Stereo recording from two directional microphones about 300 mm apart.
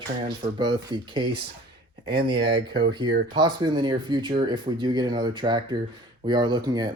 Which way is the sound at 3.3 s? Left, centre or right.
Centre.